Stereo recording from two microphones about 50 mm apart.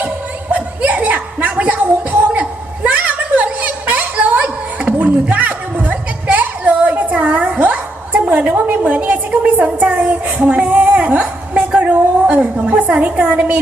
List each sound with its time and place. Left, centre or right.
0.5 s chuckle: right
1.7 s a sound: right
13.1 s a woman's voice: right